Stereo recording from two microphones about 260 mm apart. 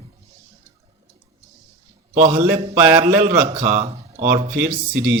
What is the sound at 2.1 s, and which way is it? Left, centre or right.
A man's voice, right.